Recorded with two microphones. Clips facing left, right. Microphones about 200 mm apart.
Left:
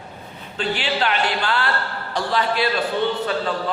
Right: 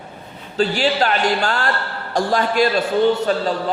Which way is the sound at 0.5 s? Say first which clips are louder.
Right 6 dB; 40° right (ahead or behind).